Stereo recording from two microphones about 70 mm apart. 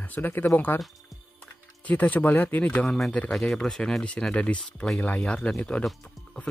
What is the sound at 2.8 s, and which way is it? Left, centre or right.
Speech, centre.